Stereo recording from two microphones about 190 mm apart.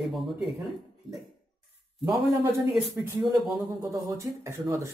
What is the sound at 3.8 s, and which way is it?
Speech, 15° right (ahead or behind).